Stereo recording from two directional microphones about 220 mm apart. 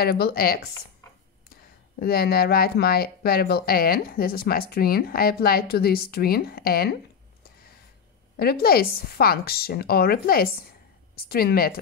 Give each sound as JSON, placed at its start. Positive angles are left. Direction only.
{"t": 0.0, "sound": "speech", "side_deg": 45}
{"t": 8.4, "sound": "speech", "side_deg": 45}